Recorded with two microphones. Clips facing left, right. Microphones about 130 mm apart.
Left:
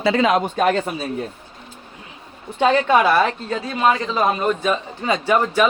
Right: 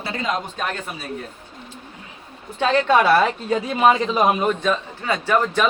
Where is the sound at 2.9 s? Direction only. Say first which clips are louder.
Even; 5° right (ahead or behind).